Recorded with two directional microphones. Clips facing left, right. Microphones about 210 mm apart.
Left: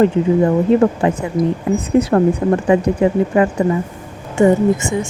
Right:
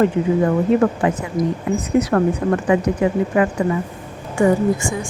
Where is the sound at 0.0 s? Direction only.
30° left (ahead or behind).